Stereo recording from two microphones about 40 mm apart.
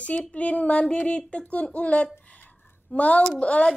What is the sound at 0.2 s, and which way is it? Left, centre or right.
Speech, left.